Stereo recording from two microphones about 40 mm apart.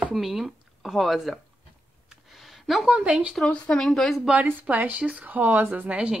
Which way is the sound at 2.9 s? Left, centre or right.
Right.